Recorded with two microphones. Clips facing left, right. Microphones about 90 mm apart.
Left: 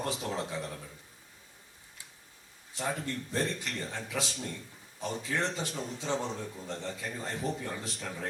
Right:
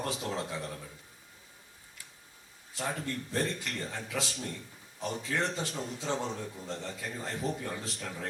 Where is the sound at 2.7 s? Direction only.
20° left (ahead or behind).